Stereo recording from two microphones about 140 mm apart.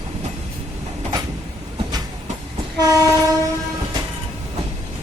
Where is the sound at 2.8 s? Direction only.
25° right (ahead or behind).